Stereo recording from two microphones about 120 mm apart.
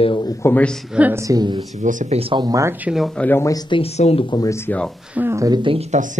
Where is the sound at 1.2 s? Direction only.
30° right (ahead or behind).